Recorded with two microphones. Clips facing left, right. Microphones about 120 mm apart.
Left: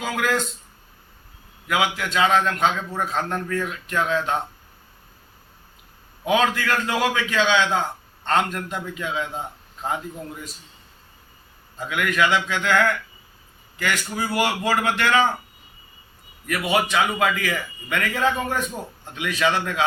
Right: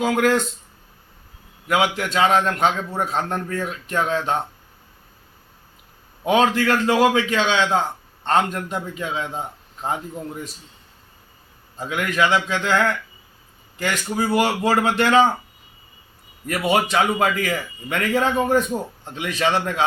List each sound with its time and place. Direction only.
0.0 s a man's voice: 35° right (ahead or behind)
1.6 s a man's voice: 35° right (ahead or behind)
6.2 s a man's voice: 30° right (ahead or behind)
11.8 s a man's voice: 30° right (ahead or behind)
16.5 s a man's voice: 35° right (ahead or behind)